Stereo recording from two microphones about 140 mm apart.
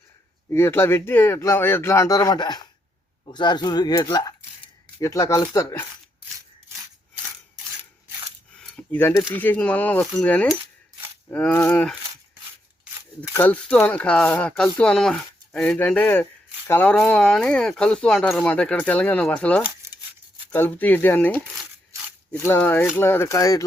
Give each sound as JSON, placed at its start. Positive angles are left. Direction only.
{"t": 0.5, "sound": "speech", "side_deg": 15}
{"t": 8.6, "sound": "a sound", "side_deg": 10}
{"t": 9.3, "sound": "speech", "side_deg": 15}
{"t": 13.3, "sound": "speech", "side_deg": 10}